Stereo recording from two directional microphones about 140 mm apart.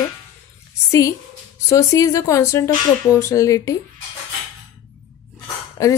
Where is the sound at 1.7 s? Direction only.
20° left (ahead or behind).